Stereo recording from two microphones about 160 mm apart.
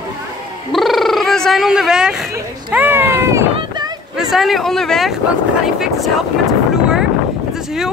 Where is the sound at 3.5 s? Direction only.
30° right (ahead or behind).